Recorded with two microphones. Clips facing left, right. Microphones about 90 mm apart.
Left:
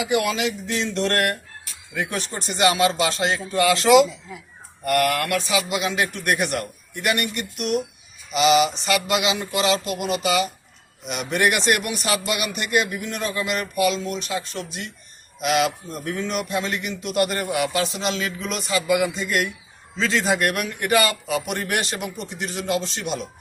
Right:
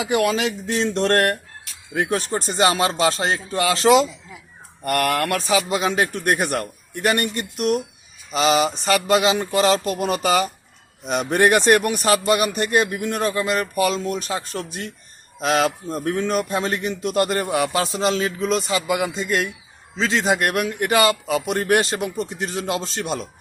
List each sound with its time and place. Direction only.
0.0 s a man's voice: 35° right (ahead or behind)